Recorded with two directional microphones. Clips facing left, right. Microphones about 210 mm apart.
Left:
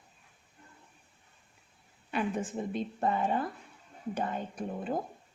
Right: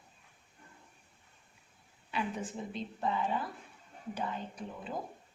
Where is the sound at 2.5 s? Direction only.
55° left (ahead or behind).